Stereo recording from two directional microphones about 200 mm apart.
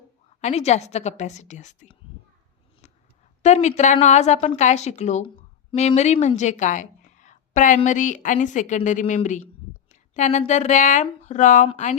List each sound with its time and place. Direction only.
0.4 s a woman's voice: 35° left (ahead or behind)
3.4 s a woman's voice: 35° left (ahead or behind)